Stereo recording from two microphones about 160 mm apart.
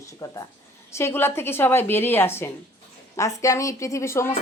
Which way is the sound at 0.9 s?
15° left (ahead or behind).